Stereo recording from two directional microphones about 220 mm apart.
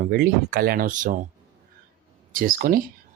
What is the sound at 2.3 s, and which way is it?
Speech, 40° right (ahead or behind).